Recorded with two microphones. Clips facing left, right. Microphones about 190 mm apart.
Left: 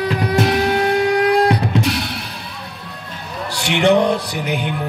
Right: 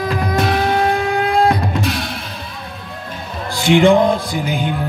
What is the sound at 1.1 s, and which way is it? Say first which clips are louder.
Music: left 1 dB; 75° left (ahead or behind).